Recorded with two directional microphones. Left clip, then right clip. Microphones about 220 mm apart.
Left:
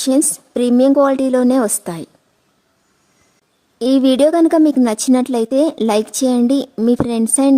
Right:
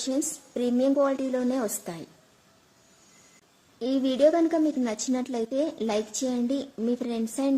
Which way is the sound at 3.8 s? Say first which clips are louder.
Left 10 dB; 50° left (ahead or behind).